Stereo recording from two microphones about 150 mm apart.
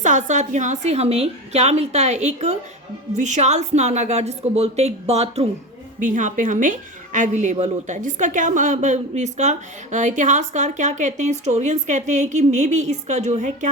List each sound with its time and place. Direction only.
0.0 s a woman's voice: 55° right (ahead or behind)
6.0 s a woman's voice: 60° right (ahead or behind)